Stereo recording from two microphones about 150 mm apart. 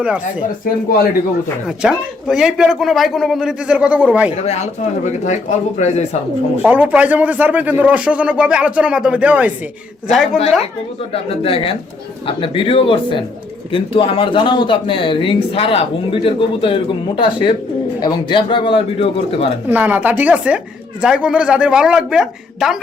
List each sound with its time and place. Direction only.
0.0 s speech: 5° right (ahead or behind)
1.6 s speech: 5° right (ahead or behind)
4.4 s speech: 45° left (ahead or behind)
6.6 s speech: 10° right (ahead or behind)
11.1 s speech: 40° left (ahead or behind)
19.6 s speech: 10° right (ahead or behind)